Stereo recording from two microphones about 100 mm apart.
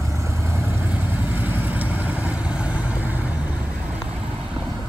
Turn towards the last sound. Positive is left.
turn(degrees=-10)  # may be behind; listen again after turning